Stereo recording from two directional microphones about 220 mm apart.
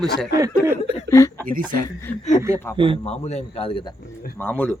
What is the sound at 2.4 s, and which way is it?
Speech, 15° right (ahead or behind).